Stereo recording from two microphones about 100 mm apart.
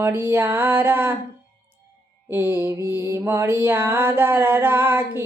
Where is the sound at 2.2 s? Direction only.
20° right (ahead or behind).